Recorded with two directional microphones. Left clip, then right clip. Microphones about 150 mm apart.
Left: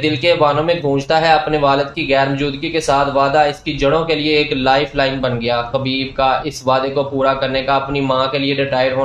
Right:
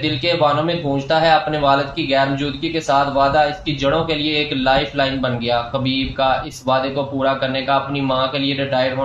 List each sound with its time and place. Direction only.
0.0 s a man's voice: 45° left (ahead or behind)